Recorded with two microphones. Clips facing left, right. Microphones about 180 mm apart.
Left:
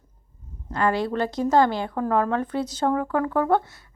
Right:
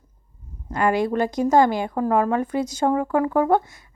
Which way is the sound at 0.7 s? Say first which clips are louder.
Right 3 dB; 15° right (ahead or behind).